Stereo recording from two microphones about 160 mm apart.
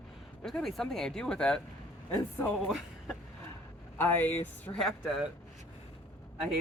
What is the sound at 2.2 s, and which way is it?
Speech, 15° left (ahead or behind).